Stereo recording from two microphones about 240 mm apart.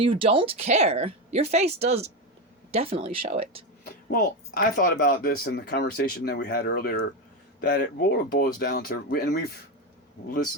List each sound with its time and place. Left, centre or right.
0.0 s speech: right
3.8 s speech: left